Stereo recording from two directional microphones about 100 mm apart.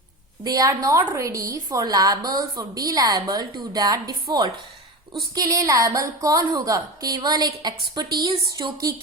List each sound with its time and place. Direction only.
0.4 s a woman's voice: 35° right (ahead or behind)
8.3 s speech: 60° right (ahead or behind)